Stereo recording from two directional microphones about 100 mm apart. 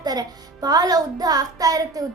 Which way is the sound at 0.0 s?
40° right (ahead or behind).